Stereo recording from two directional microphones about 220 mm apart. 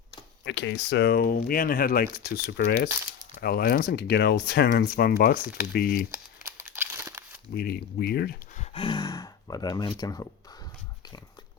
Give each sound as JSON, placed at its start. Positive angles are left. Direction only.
{"t": 0.4, "sound": "speech", "side_deg": 55}
{"t": 6.7, "sound": "crumpling", "side_deg": -10}
{"t": 7.5, "sound": "speech", "side_deg": 45}
{"t": 8.5, "sound": "speech", "side_deg": 25}